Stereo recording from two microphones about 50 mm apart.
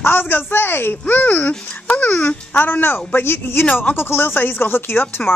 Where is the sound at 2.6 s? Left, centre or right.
Left.